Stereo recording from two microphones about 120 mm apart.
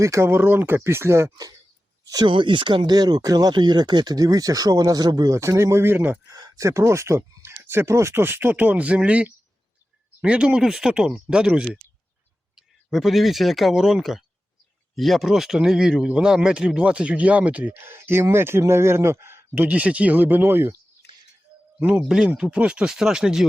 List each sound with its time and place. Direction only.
0.0 s speech: 25° right (ahead or behind)
2.0 s speech: 35° right (ahead or behind); by 6.3 s 15° right (ahead or behind)
6.3 s speech: 30° right (ahead or behind)
21.8 s speech: 15° right (ahead or behind)